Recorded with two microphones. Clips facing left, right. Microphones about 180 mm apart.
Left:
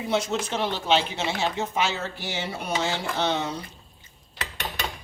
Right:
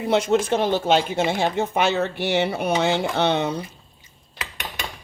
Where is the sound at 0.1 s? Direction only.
55° right (ahead or behind).